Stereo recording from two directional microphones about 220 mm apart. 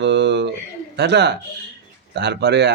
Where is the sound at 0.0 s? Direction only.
50° right (ahead or behind).